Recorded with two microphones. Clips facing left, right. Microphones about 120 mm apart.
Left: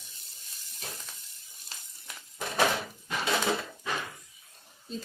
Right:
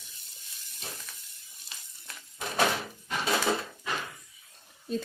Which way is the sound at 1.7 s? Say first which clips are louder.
Left 1 dB; 35° left (ahead or behind).